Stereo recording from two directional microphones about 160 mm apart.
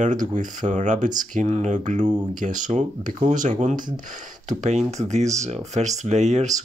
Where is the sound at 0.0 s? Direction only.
50° right (ahead or behind).